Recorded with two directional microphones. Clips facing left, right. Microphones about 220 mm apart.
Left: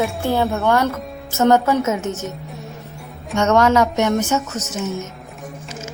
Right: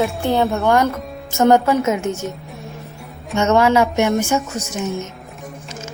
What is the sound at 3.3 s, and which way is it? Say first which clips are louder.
A woman's voice: even; 5° right (ahead or behind).